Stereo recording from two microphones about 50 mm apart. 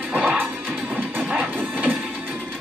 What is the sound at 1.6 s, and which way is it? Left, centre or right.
Printer, right.